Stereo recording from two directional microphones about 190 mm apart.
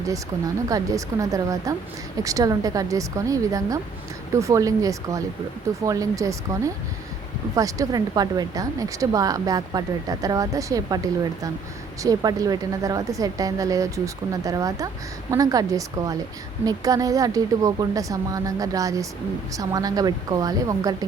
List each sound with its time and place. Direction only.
0.0 s a woman's voice: 15° right (ahead or behind)
7.5 s a woman's voice: 15° right (ahead or behind)